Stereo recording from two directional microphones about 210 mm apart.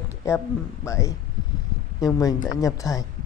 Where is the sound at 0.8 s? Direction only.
15° left (ahead or behind).